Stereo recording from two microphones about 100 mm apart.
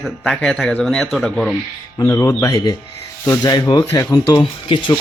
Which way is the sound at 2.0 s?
40° left (ahead or behind).